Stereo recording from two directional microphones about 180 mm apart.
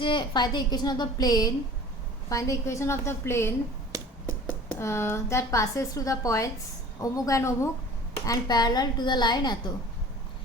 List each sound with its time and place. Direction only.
0.0 s a woman's voice: 25° left (ahead or behind)